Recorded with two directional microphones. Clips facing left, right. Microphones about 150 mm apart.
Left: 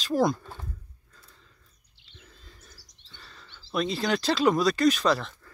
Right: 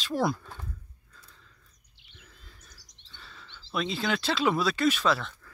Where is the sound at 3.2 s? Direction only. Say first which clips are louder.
Right 1 dB; centre (ahead or behind).